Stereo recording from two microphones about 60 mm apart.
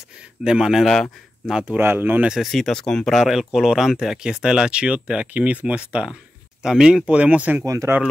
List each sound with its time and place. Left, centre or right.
0.4 s speech: centre
1.8 s speech: right
2.4 s speech: centre
3.2 s speech: centre
7.1 s speech: right
7.6 s speech: right